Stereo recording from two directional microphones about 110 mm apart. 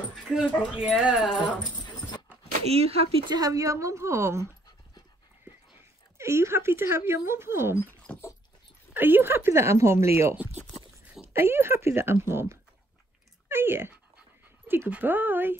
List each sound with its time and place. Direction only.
0.1 s speech: 5° right (ahead or behind)
2.7 s speech: 65° right (ahead or behind)
3.3 s speech: 35° right (ahead or behind)
6.1 s speech: 25° right (ahead or behind)
7.8 s dog: 20° left (ahead or behind)
8.9 s speech: 20° right (ahead or behind)